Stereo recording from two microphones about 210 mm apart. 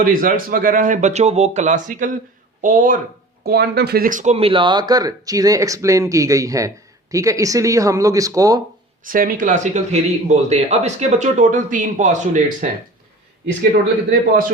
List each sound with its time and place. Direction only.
0.0 s speech: 40° right (ahead or behind); by 8.6 s 15° right (ahead or behind)
9.0 s speech: 40° right (ahead or behind)